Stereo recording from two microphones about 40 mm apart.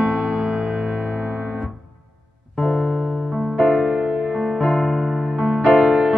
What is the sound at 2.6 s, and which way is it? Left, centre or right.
Music, centre.